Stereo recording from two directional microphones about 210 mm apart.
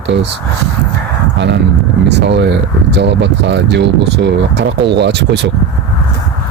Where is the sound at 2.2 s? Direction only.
55° right (ahead or behind).